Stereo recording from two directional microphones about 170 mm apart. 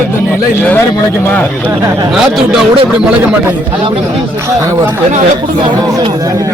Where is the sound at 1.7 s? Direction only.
20° right (ahead or behind).